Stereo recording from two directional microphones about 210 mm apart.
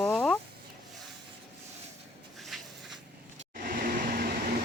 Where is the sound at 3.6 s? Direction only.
45° right (ahead or behind).